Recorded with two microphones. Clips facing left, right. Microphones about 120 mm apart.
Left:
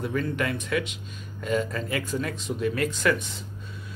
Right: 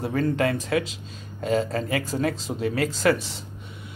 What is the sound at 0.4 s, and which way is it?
Speech, 30° right (ahead or behind).